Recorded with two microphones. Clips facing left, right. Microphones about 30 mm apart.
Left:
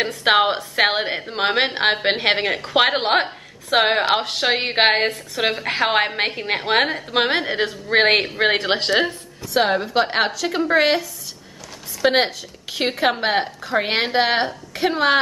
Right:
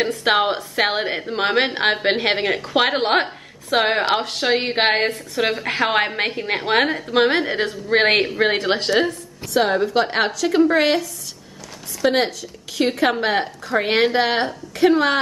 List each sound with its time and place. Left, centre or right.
0.0 s a woman's voice: centre
8.4 s a woman's voice: centre
12.0 s a woman's voice: left